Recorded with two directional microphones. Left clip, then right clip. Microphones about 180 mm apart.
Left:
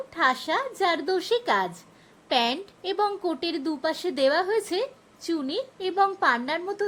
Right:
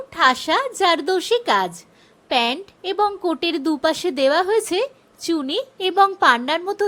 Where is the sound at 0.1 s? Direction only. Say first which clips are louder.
Right 7 dB; 15° right (ahead or behind).